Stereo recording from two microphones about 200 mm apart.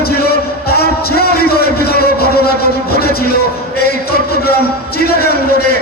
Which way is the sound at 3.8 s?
50° left (ahead or behind).